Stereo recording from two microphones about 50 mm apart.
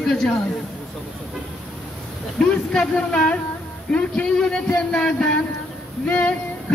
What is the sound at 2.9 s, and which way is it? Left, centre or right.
Speech, centre.